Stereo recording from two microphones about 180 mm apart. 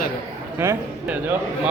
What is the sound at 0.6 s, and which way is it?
A man's voice, 15° right (ahead or behind).